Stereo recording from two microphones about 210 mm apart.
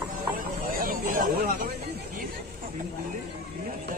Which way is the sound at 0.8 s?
40° right (ahead or behind).